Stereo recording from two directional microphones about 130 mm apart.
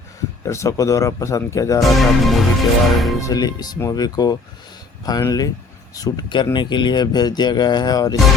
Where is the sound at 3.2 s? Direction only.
30° left (ahead or behind).